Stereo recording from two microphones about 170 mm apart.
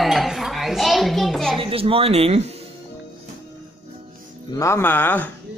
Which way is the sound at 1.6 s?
35° right (ahead or behind).